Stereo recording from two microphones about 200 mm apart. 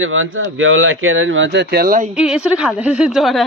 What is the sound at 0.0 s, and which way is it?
Speech, 80° right.